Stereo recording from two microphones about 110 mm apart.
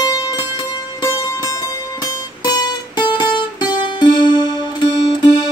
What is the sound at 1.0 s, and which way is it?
Music, 30° left (ahead or behind).